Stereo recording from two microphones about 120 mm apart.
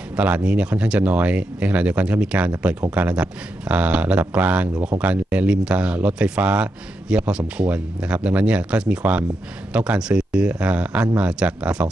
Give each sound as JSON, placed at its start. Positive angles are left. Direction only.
{"t": 0.1, "sound": "speech", "side_deg": -10}